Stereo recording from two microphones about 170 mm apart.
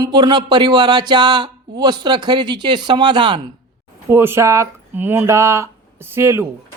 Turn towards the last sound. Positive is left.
turn(degrees=-15)  # may be behind; listen again after turning